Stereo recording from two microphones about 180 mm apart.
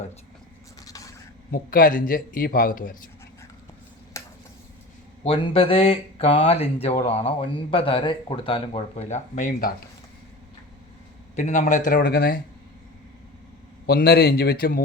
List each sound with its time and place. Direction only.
0.9 s a sound: 20° left (ahead or behind)
1.5 s a man's voice: 50° left (ahead or behind)
4.1 s a sound: 15° left (ahead or behind)
5.2 s speech: 30° left (ahead or behind); by 9.7 s 55° left (ahead or behind)
11.3 s a man's voice: 40° left (ahead or behind)
11.9 s a man's voice: 55° left (ahead or behind)
13.8 s a man's voice: 60° left (ahead or behind)